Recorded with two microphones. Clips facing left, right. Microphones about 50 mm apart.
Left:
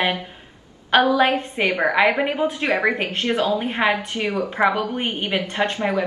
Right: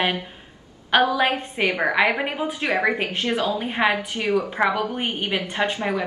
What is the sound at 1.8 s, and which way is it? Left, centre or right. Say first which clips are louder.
Speech: left 3 dB; centre.